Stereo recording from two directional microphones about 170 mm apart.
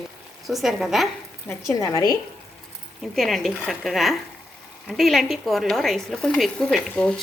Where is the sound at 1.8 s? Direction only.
20° left (ahead or behind).